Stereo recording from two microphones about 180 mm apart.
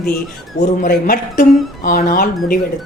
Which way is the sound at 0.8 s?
50° left (ahead or behind).